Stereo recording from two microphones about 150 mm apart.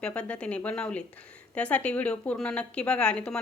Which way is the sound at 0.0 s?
10° left (ahead or behind).